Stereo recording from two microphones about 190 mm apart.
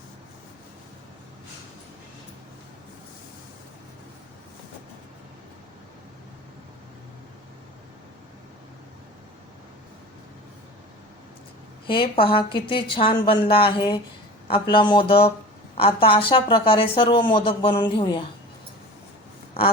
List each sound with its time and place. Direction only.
11.9 s a woman's voice: 30° left (ahead or behind)